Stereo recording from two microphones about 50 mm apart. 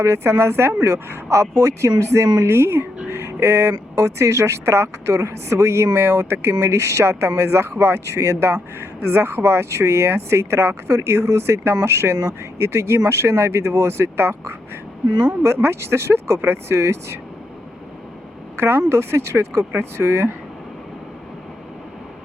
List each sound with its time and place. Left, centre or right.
0.0 s a woman's voice: right
6.6 s speech: right
8.8 s a woman's voice: right
18.9 s speech: right